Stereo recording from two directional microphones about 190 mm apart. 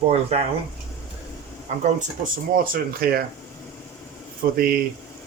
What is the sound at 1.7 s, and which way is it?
Speech, 35° right (ahead or behind).